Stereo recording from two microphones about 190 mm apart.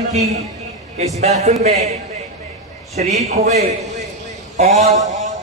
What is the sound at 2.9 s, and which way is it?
A man's voice, 35° right (ahead or behind).